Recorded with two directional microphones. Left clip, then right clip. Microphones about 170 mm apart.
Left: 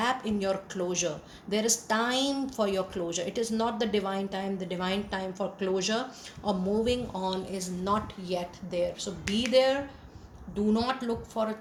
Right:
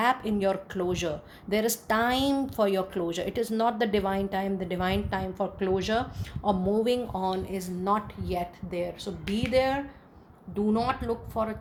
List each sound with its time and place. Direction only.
0.0 s speech: 55° right (ahead or behind)